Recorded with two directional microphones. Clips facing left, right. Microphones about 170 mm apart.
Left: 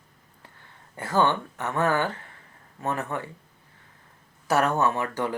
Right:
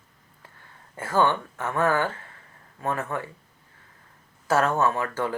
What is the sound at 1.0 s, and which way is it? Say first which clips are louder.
Speech: right 1 dB; 20° left (ahead or behind).